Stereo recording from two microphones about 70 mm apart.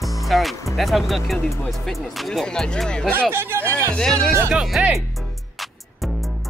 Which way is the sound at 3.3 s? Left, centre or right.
Right.